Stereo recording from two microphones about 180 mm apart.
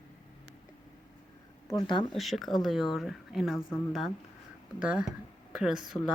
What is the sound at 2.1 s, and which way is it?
Speech, centre (ahead or behind).